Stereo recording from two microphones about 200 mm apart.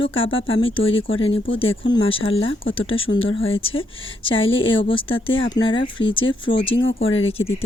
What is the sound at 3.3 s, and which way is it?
Speech, 80° left.